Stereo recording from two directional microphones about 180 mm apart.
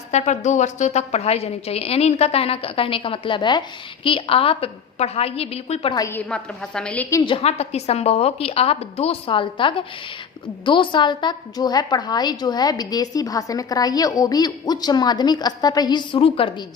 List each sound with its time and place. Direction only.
0.1 s a woman's voice: 40° left (ahead or behind)
5.9 s a woman's voice: 15° left (ahead or behind)
7.2 s a woman's voice: 30° left (ahead or behind)